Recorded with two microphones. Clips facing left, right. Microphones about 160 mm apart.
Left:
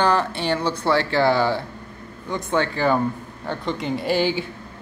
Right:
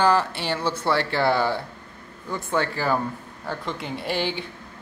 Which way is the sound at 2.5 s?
5° right (ahead or behind).